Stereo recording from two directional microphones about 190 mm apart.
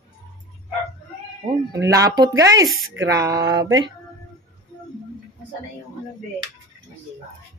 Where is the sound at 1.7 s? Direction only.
15° right (ahead or behind).